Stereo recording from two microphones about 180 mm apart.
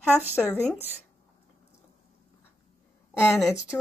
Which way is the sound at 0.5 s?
10° right (ahead or behind).